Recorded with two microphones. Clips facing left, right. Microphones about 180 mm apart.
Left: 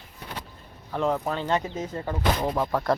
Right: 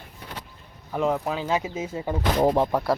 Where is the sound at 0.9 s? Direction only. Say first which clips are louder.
Right 1 dB; 5° right (ahead or behind).